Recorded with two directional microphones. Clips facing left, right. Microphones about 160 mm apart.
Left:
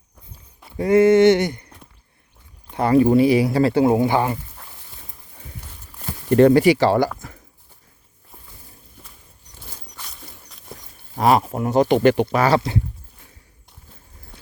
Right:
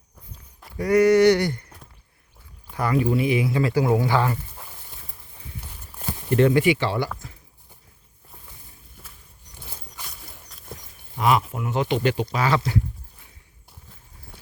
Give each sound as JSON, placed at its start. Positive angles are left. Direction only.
{"t": 0.8, "sound": "a sound", "side_deg": 25}
{"t": 2.7, "sound": "speech", "side_deg": 30}
{"t": 6.3, "sound": "speech", "side_deg": 40}
{"t": 11.1, "sound": "speech", "side_deg": 40}